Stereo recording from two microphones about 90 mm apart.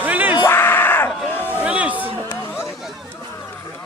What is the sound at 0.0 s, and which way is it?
Yell, 20° right (ahead or behind).